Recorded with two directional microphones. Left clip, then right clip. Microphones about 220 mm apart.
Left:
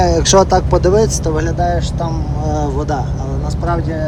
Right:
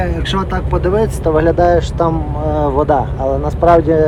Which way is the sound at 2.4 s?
10° left (ahead or behind).